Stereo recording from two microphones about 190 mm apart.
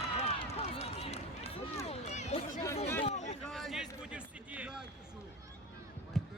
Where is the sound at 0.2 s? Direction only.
35° left (ahead or behind).